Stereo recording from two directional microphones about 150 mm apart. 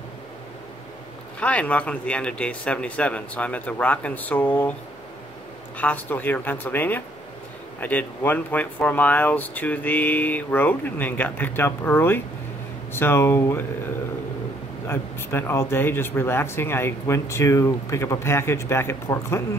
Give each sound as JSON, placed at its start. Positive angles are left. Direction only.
{"t": 1.4, "sound": "speech", "side_deg": 10}
{"t": 5.8, "sound": "speech", "side_deg": 10}
{"t": 14.9, "sound": "speech", "side_deg": 15}